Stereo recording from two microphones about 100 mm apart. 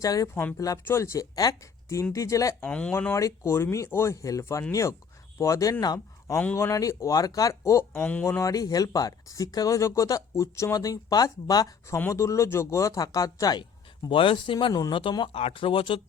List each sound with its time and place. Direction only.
0.0 s speech: 35° left (ahead or behind)
0.3 s speech: 20° left (ahead or behind)
2.6 s speech: 15° left (ahead or behind)
3.1 s speech: 30° left (ahead or behind)
6.6 s speech: 30° left (ahead or behind)
14.1 s speech: 60° left (ahead or behind)
14.7 s speech: 40° left (ahead or behind)
15.2 s speech: 70° left (ahead or behind)